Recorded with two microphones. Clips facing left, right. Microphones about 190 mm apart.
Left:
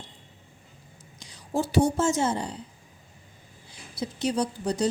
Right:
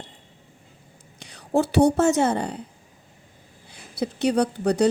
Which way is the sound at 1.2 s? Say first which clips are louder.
Right 6 dB; 65° right (ahead or behind).